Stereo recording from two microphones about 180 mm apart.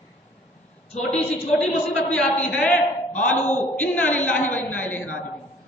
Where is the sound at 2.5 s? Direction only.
5° left (ahead or behind).